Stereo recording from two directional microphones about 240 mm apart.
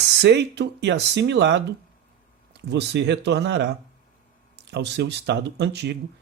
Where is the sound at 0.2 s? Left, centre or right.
Right.